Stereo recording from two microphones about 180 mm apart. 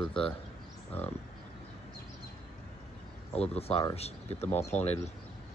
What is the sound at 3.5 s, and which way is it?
Speech, 35° left (ahead or behind).